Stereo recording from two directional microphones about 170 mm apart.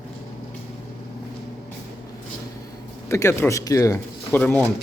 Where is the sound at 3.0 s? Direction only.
15° left (ahead or behind).